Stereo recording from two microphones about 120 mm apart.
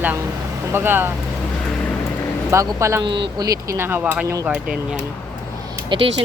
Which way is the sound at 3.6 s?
20° right (ahead or behind).